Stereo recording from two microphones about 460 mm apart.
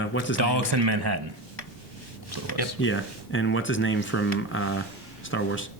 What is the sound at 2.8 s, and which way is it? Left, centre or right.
Speech, left.